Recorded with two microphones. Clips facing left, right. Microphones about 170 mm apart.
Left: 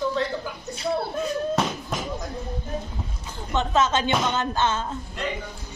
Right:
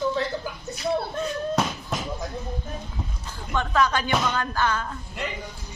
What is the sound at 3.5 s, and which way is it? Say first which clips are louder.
Speech: left 1 dB; 20° left (ahead or behind).